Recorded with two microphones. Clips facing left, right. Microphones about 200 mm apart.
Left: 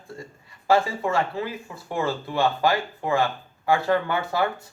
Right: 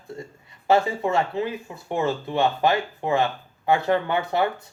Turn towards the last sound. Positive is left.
turn(degrees=-20)  # may be behind; listen again after turning